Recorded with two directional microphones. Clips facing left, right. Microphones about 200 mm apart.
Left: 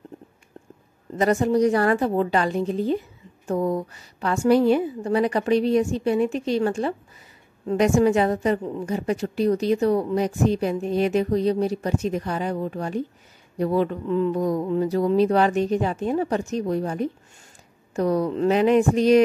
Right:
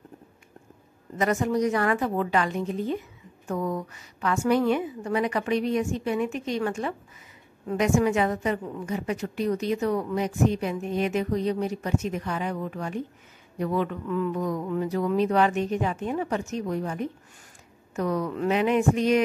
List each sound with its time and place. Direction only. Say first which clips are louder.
1.1 s a woman's voice: left 5 dB; 35° left (ahead or behind)